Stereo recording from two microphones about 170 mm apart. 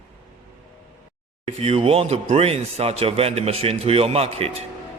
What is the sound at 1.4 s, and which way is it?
Speech, 35° right (ahead or behind).